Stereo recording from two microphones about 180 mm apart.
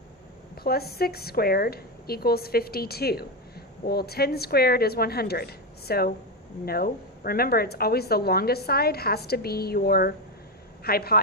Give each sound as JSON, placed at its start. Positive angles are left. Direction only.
{"t": 0.5, "sound": "a woman's voice", "side_deg": 60}